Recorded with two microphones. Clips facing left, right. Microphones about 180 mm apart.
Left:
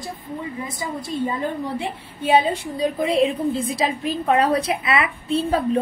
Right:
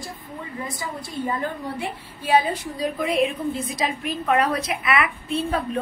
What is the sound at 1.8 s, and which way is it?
A woman's voice, 25° left (ahead or behind).